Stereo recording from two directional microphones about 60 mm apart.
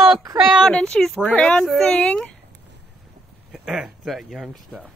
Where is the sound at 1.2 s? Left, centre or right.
Centre.